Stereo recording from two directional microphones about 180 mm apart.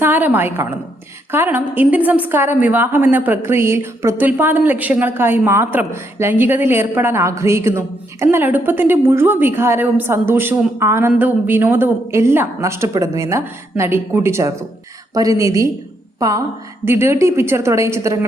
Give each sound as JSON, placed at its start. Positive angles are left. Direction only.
{"t": 0.0, "sound": "a woman's voice", "side_deg": -10}